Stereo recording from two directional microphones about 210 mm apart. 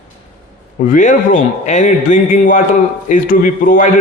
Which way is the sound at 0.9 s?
40° left (ahead or behind).